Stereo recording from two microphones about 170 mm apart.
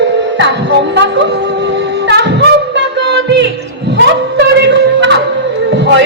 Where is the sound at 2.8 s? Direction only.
90° right.